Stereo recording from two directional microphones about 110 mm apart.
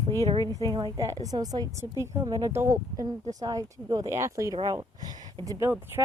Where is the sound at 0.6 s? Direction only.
40° right (ahead or behind).